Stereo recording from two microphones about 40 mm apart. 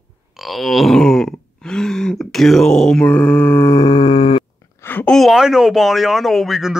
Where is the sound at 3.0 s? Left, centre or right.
Left.